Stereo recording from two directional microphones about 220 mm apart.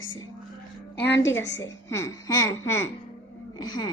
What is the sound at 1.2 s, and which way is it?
A woman's voice, 10° left (ahead or behind).